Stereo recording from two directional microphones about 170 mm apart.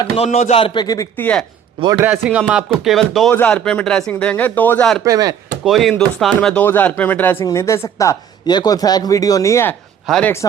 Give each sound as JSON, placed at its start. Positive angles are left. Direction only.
{"t": 0.3, "sound": "a man's voice", "side_deg": 40}
{"t": 1.1, "sound": "speech", "side_deg": 10}
{"t": 2.0, "sound": "speech", "side_deg": -10}
{"t": 5.0, "sound": "chop", "side_deg": -20}
{"t": 5.6, "sound": "speech", "side_deg": 0}
{"t": 10.1, "sound": "speech", "side_deg": 5}